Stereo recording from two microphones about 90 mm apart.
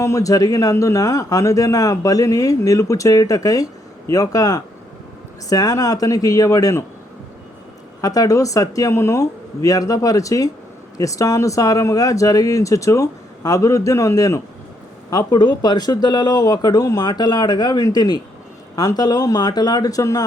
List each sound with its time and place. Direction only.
0.0 s speech: 35° left (ahead or behind)
8.0 s speech: 40° left (ahead or behind)
15.1 s speech: 45° left (ahead or behind)